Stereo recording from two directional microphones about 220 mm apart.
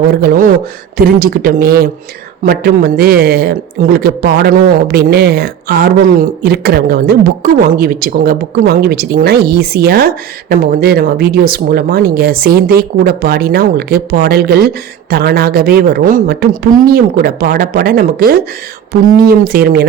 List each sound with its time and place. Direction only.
0.2 s speech: 40° right (ahead or behind)